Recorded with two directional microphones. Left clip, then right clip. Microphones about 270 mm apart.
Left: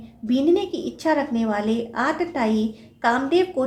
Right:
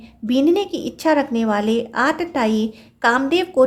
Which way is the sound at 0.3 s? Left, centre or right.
Right.